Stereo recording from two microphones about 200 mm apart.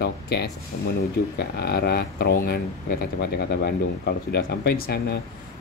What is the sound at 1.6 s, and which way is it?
Speech, 55° left (ahead or behind).